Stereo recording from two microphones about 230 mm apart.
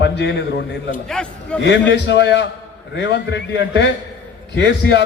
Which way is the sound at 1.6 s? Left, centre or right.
Left.